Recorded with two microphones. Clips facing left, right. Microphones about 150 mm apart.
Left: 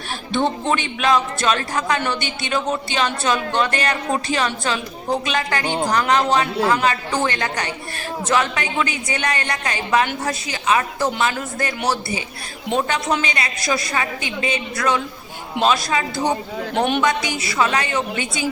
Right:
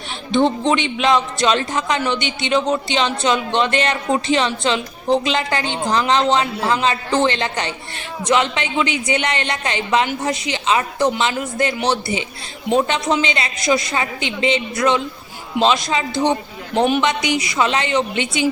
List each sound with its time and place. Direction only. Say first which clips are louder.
0.3 s a man's voice: right 4 dB; 15° right (ahead or behind)
13.2 s a man's voice: right 4 dB; 25° right (ahead or behind)
16.7 s speech: right 3 dB; 5° right (ahead or behind)
17.0 s a man's voice: right 2 dB; 20° right (ahead or behind)